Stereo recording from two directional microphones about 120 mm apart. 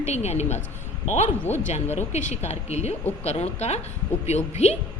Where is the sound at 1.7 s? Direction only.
65° left (ahead or behind).